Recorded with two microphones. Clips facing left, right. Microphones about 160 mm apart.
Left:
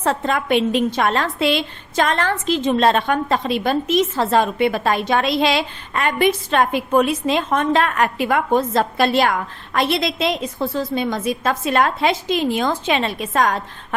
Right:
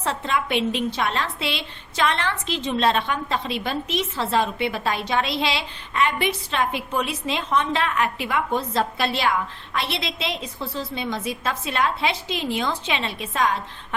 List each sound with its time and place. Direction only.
0.0 s a woman's voice: 50° left (ahead or behind)